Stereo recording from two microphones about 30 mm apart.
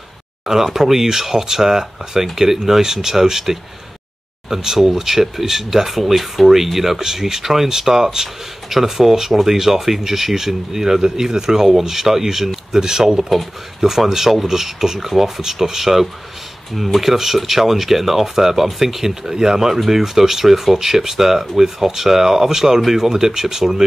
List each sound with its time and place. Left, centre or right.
0.5 s speech: centre